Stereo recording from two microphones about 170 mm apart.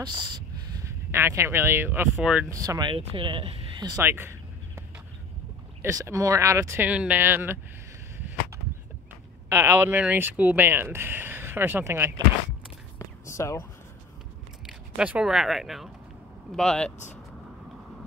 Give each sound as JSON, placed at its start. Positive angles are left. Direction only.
{"t": 0.0, "sound": "speech", "side_deg": -30}
{"t": 0.7, "sound": "speech", "side_deg": -15}
{"t": 2.5, "sound": "speech", "side_deg": -20}
{"t": 4.0, "sound": "a sound", "side_deg": -15}
{"t": 5.8, "sound": "speech", "side_deg": -15}
{"t": 9.5, "sound": "speech", "side_deg": -15}
{"t": 13.2, "sound": "a sound", "side_deg": 15}
{"t": 14.7, "sound": "speech", "side_deg": -5}